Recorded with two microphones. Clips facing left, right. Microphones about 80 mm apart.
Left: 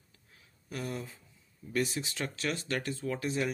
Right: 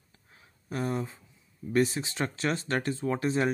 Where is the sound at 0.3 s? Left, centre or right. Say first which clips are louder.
Right 5 dB; right.